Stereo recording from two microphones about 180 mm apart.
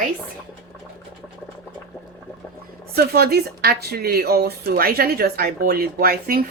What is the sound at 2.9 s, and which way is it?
Speech, 60° right (ahead or behind).